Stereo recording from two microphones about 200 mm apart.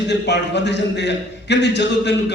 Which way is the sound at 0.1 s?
60° left (ahead or behind).